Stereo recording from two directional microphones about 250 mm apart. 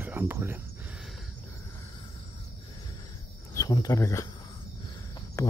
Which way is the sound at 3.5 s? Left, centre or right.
Centre.